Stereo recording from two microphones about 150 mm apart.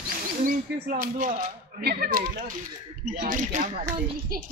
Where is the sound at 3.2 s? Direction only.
60° right (ahead or behind).